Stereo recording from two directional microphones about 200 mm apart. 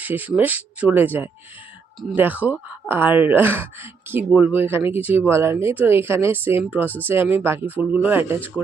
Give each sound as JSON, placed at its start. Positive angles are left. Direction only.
{"t": 0.0, "sound": "speech", "side_deg": -10}